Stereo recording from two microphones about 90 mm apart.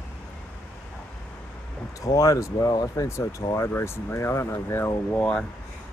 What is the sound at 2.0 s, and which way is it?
Speech, 35° left (ahead or behind).